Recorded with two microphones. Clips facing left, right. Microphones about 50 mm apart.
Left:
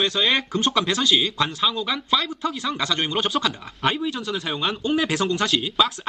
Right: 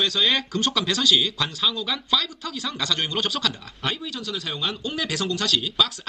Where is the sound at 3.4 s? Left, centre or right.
Left.